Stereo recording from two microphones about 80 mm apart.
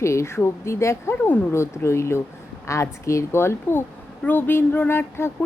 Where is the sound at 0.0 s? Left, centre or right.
Left.